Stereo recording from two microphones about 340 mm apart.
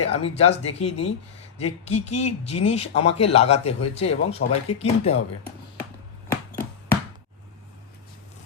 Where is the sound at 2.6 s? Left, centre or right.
Centre.